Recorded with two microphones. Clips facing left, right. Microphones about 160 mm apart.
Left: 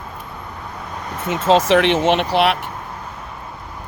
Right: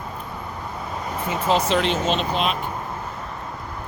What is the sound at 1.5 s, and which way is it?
Speech, 90° left.